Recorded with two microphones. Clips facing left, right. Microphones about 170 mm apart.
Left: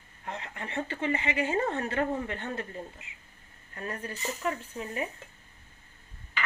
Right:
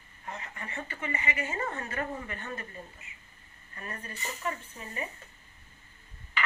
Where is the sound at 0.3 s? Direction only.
65° left (ahead or behind).